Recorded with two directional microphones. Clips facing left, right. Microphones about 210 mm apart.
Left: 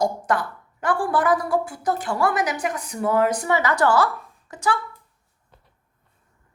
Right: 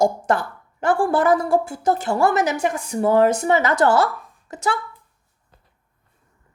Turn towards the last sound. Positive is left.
turn(degrees=-25)  # may be behind; listen again after turning